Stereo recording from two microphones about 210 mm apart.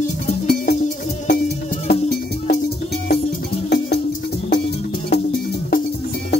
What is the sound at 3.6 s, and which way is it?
Music, 50° left (ahead or behind).